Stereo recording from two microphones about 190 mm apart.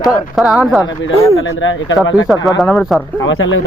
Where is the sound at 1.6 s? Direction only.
85° left.